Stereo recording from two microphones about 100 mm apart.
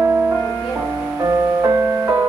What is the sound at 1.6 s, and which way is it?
Music, 30° right (ahead or behind).